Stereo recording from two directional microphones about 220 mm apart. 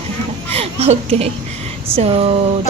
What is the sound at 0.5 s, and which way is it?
A woman's voice, 30° right (ahead or behind).